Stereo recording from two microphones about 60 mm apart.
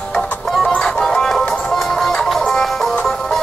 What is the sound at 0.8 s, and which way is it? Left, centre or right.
Music, centre.